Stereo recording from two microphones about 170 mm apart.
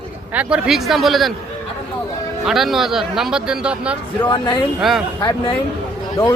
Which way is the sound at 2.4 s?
Centre (ahead or behind).